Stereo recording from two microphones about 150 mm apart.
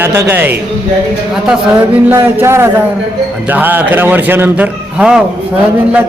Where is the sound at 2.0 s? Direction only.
15° right (ahead or behind).